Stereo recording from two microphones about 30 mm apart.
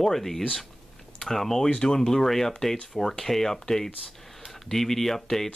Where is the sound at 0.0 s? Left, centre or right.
Centre.